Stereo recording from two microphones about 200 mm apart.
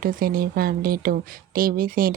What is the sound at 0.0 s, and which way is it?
Speech, 45° right (ahead or behind).